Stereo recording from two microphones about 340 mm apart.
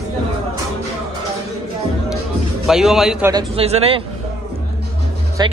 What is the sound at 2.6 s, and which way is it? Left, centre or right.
A man's voice, centre.